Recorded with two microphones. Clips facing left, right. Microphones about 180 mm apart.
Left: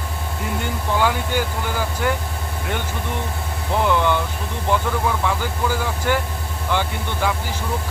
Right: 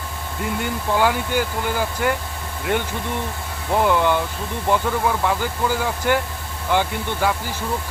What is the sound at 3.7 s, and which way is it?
Speech, 10° right (ahead or behind).